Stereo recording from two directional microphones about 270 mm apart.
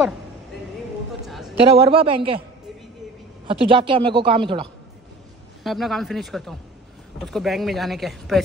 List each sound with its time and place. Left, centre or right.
1.2 s a sound: centre
1.7 s speech: centre
3.4 s speech: centre
5.6 s speech: centre